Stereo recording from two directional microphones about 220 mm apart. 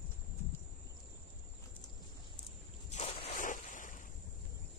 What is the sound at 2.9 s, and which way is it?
Ocean, 35° left (ahead or behind).